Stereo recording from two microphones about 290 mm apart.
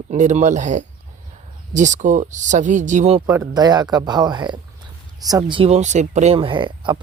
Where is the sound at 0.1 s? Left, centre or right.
Right.